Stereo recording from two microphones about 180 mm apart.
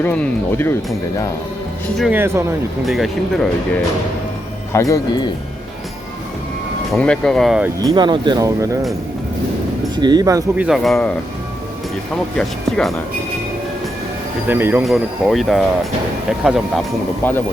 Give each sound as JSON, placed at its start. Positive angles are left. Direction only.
{"t": 0.0, "sound": "speech", "side_deg": 10}
{"t": 2.0, "sound": "speech", "side_deg": -10}
{"t": 2.8, "sound": "speech", "side_deg": 0}
{"t": 4.7, "sound": "speech", "side_deg": 15}
{"t": 6.9, "sound": "speech", "side_deg": 5}
{"t": 7.8, "sound": "speech", "side_deg": -20}
{"t": 9.9, "sound": "speech", "side_deg": -25}
{"t": 10.7, "sound": "speech", "side_deg": 0}
{"t": 12.1, "sound": "speech", "side_deg": 5}
{"t": 14.4, "sound": "speech", "side_deg": -10}
{"t": 14.8, "sound": "speech", "side_deg": 0}
{"t": 17.2, "sound": "speech", "side_deg": 10}